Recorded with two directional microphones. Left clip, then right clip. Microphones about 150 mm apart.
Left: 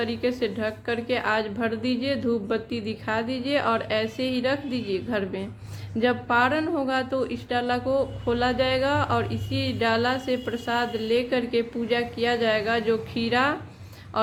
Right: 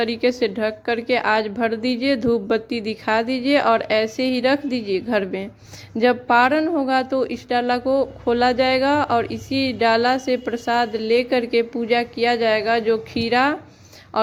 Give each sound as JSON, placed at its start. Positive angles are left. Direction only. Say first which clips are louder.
{"t": 0.0, "sound": "a woman's voice", "louder": "right 6 dB", "side_deg": -55}